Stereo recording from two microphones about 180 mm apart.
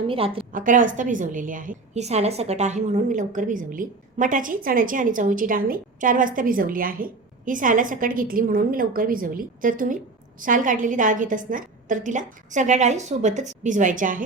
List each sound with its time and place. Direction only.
0.1 s a woman's voice: 30° right (ahead or behind)
0.5 s a woman's voice: 45° right (ahead or behind)